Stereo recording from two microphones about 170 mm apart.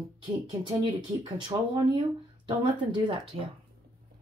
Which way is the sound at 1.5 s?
30° right (ahead or behind).